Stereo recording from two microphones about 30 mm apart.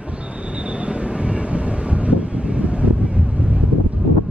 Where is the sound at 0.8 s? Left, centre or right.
Right.